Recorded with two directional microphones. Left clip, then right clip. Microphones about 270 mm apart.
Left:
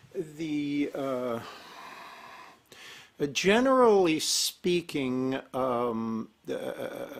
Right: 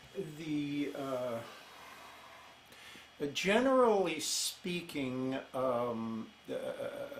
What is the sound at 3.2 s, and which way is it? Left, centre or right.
Speech, left.